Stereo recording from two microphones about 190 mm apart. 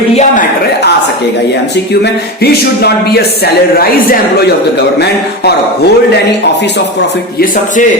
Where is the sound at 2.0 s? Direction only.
60° left (ahead or behind).